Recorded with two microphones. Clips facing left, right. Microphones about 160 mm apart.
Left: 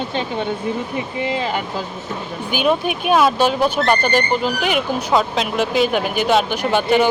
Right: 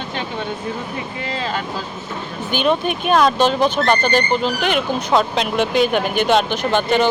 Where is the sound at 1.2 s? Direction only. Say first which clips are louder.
Left 1 dB; 15° left (ahead or behind).